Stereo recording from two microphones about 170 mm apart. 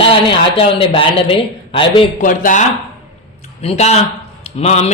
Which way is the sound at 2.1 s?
50° left (ahead or behind).